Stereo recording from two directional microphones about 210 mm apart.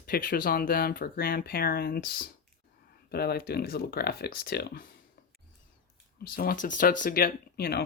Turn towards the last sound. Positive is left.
turn(degrees=45)  # may be behind; listen again after turning